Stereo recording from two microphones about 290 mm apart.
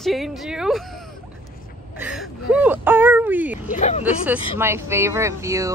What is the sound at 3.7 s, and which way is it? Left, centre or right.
Speech, left.